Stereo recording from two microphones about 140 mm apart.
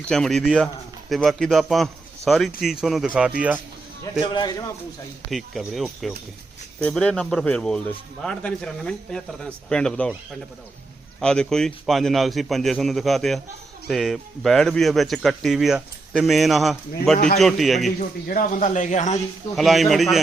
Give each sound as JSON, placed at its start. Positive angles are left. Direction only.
{"t": 0.1, "sound": "speech", "side_deg": 5}
{"t": 4.2, "sound": "speech", "side_deg": 30}
{"t": 5.3, "sound": "speech", "side_deg": 0}
{"t": 11.2, "sound": "speech", "side_deg": 5}
{"t": 17.2, "sound": "speech", "side_deg": 70}
{"t": 17.4, "sound": "speech", "side_deg": 0}
{"t": 18.0, "sound": "speech", "side_deg": 75}
{"t": 19.5, "sound": "speech", "side_deg": 0}